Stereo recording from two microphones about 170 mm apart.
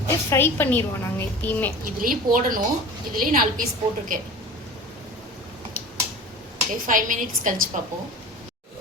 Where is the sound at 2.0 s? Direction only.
55° right (ahead or behind).